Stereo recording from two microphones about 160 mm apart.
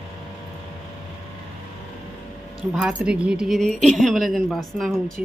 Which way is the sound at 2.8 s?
5° right (ahead or behind).